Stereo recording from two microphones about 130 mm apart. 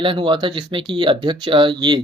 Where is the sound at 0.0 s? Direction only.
40° right (ahead or behind).